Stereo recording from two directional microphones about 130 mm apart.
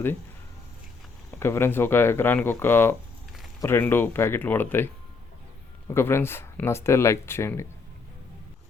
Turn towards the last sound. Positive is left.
turn(degrees=20)  # may be behind; listen again after turning